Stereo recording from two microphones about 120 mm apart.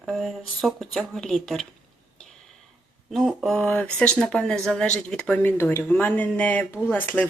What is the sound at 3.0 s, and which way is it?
Speech, centre (ahead or behind).